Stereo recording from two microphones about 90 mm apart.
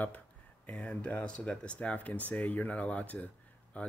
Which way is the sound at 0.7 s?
10° left (ahead or behind).